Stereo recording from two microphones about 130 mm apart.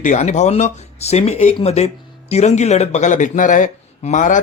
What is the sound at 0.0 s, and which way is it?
Speech, 70° left (ahead or behind).